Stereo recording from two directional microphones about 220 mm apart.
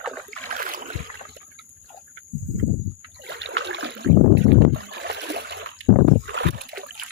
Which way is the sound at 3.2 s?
55° right (ahead or behind).